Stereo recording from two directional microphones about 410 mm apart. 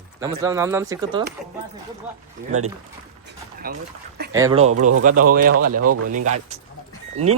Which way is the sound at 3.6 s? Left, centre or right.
Right.